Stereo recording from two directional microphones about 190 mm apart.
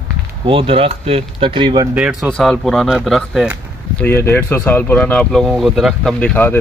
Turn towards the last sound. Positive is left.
turn(degrees=10)  # may be behind; listen again after turning